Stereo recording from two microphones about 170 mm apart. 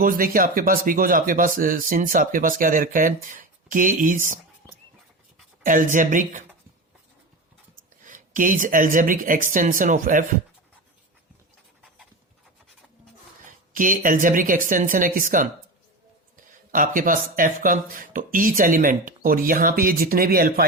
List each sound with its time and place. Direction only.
0.0 s speech: 55° right (ahead or behind)
5.6 s speech: 50° right (ahead or behind)
8.0 s speech: 50° right (ahead or behind)
13.7 s speech: 50° right (ahead or behind)
16.7 s speech: 50° right (ahead or behind)